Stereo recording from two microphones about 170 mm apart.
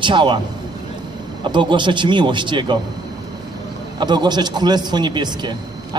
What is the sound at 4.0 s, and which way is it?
Speech, 25° right (ahead or behind).